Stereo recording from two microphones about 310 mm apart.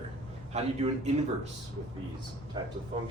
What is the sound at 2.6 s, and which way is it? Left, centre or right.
Speech, centre.